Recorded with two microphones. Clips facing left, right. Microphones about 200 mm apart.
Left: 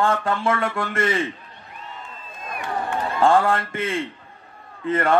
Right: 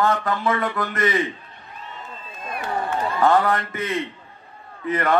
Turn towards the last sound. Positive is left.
turn(degrees=25)  # may be behind; listen again after turning